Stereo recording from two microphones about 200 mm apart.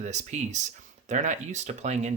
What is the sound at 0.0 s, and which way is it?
Speech, 35° right (ahead or behind).